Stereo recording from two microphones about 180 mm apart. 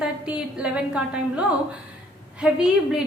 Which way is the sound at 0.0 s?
5° right (ahead or behind).